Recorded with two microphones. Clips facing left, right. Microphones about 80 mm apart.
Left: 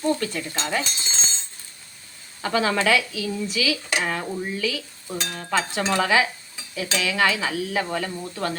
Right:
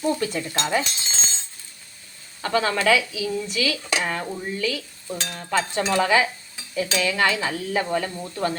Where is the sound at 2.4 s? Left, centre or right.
Centre.